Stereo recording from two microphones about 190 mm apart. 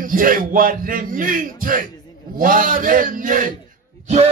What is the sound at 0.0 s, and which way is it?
Speech, 45° right (ahead or behind).